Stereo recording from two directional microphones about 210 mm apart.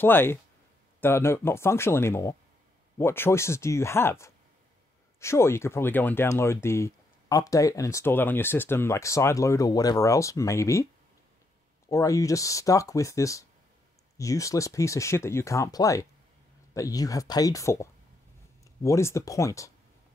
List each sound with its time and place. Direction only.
0.0 s speech: 10° left (ahead or behind)
11.9 s speech: 15° left (ahead or behind)